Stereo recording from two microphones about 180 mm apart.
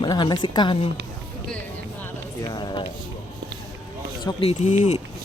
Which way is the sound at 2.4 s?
25° left (ahead or behind).